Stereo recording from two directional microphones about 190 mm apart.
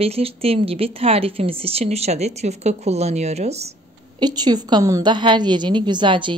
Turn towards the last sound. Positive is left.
turn(degrees=-25)  # may be behind; listen again after turning